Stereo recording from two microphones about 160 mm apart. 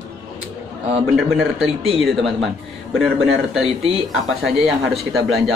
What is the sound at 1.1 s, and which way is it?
A man's voice, centre (ahead or behind).